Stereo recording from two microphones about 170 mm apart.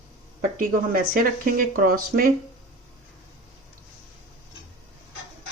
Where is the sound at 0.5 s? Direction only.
55° right (ahead or behind).